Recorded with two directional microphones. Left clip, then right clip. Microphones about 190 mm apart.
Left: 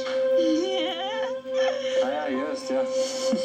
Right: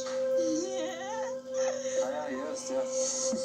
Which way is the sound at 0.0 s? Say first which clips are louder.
Left 7 dB; 30° left (ahead or behind).